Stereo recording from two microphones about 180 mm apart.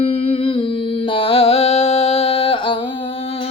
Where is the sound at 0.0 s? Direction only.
35° left (ahead or behind).